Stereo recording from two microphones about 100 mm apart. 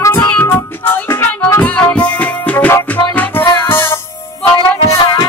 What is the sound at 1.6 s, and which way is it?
Music, 10° left (ahead or behind).